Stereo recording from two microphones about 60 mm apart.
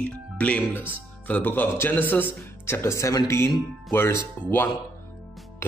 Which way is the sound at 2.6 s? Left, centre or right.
Left.